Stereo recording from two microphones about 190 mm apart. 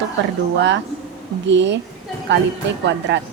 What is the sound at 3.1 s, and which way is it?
Speech, 65° right (ahead or behind).